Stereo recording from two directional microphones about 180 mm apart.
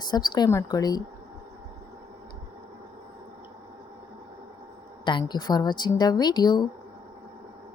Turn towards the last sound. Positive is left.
turn(degrees=25)  # may be behind; listen again after turning